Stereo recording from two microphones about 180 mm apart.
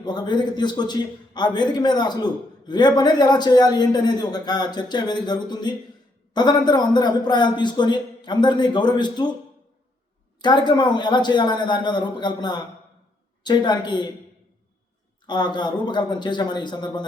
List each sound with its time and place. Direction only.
0.0 s a man's voice: 25° left (ahead or behind)
10.4 s a man's voice: 25° left (ahead or behind)
15.3 s a man's voice: 25° left (ahead or behind)